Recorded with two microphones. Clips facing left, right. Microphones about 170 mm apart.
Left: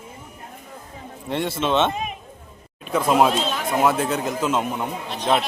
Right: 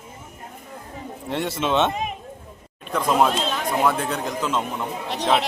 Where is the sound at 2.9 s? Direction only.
5° left (ahead or behind).